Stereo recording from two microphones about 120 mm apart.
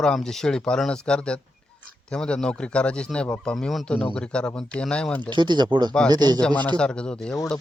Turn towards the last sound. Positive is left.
turn(degrees=10)  # may be behind; listen again after turning